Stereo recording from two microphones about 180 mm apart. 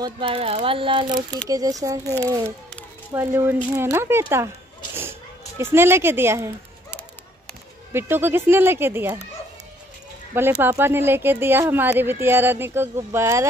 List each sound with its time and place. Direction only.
0.0 s speech: 30° right (ahead or behind); by 4.5 s 15° right (ahead or behind)
5.6 s speech: 15° right (ahead or behind)
7.9 s speech: 10° right (ahead or behind)
10.3 s speech: 10° right (ahead or behind)